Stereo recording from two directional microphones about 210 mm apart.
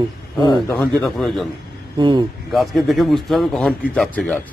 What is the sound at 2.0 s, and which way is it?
Speech, 25° right (ahead or behind).